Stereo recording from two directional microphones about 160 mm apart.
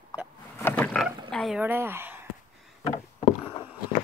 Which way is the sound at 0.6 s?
10° left (ahead or behind).